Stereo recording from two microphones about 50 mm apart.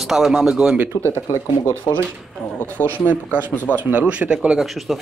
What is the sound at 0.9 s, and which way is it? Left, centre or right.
Speech, left.